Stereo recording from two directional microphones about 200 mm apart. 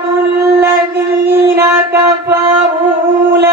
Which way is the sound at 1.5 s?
10° right (ahead or behind).